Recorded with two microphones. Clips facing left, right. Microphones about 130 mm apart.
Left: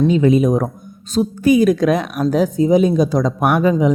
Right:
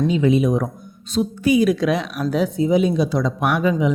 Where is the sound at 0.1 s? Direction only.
45° left (ahead or behind).